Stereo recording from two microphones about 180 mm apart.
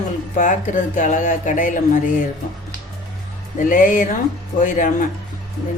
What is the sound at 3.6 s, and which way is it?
Speech, 50° left (ahead or behind).